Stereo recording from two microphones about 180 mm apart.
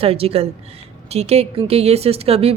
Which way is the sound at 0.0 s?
30° right (ahead or behind).